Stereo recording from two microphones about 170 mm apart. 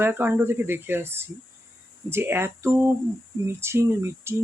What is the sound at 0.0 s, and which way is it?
Speech, 10° right (ahead or behind).